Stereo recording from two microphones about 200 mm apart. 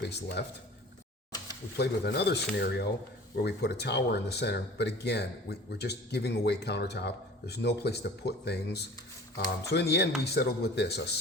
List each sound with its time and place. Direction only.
0.0 s speech: 55° left (ahead or behind)
1.8 s speech: 55° left (ahead or behind)